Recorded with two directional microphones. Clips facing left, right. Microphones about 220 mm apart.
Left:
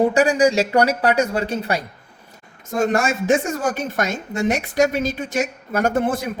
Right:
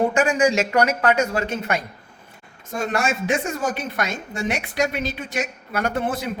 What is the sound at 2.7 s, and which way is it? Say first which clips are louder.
Speech: left 4 dB; 45° left (ahead or behind).